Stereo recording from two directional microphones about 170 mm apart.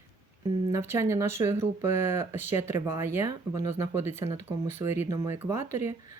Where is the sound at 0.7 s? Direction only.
15° right (ahead or behind).